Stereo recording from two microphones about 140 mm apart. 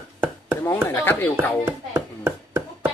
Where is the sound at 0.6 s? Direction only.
15° left (ahead or behind).